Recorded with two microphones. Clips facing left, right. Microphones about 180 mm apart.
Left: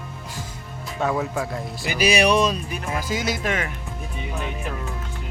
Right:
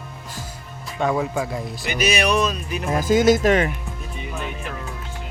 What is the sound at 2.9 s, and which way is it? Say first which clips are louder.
Speech: right 12 dB; 45° right (ahead or behind).